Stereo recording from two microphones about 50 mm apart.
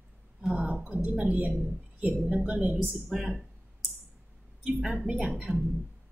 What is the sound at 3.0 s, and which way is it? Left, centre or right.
Speech, centre.